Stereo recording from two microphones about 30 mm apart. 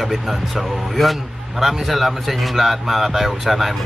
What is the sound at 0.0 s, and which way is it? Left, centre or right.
Speech, centre.